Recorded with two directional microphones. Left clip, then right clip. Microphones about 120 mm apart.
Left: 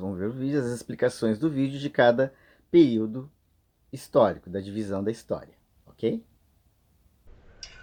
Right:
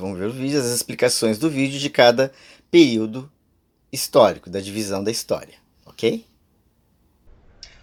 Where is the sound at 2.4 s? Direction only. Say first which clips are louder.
Right 5 dB; 10° right (ahead or behind).